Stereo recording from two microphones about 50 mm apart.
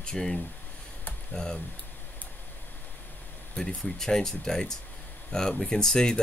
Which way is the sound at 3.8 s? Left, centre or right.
Centre.